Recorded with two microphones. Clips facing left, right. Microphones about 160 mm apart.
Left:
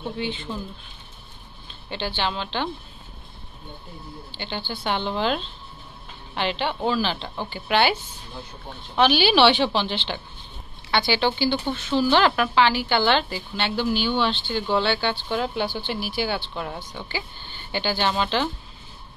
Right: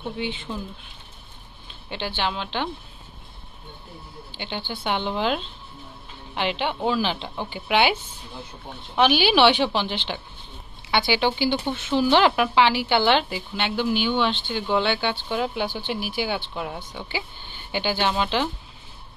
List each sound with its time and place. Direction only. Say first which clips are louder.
0.5 s speech: even; centre (ahead or behind)
1.9 s speech: even; 10° right (ahead or behind)
4.4 s speech: even; 15° right (ahead or behind)
8.9 s speech: even; 15° right (ahead or behind)